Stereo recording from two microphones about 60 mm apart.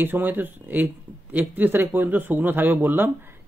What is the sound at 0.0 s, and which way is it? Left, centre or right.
Speech, right.